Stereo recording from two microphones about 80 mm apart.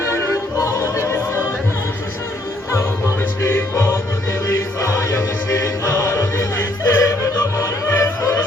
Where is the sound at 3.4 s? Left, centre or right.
Left.